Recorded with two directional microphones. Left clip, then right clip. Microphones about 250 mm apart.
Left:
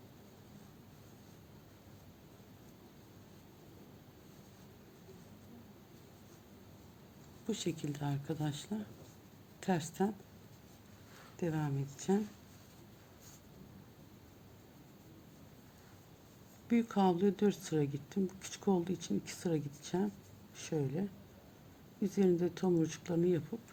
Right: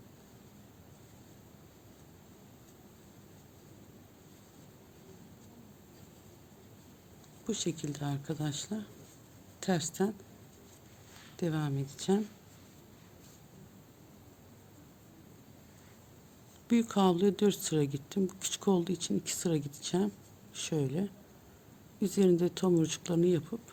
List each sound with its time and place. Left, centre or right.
7.4 s speech: right
11.3 s speech: right
16.6 s speech: right